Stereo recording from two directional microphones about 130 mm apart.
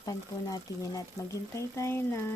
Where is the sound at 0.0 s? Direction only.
30° left (ahead or behind).